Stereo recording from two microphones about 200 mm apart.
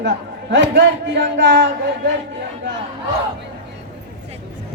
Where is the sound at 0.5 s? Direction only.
65° right (ahead or behind).